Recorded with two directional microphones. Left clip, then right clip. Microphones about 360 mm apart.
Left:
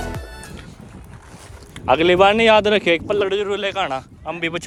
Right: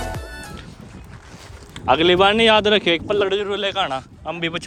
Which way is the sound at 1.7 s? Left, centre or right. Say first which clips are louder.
Even; centre.